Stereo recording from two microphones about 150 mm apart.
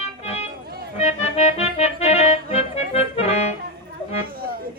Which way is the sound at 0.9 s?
45° left (ahead or behind).